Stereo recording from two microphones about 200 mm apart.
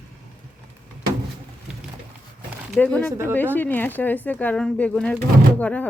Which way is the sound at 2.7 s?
5° left (ahead or behind).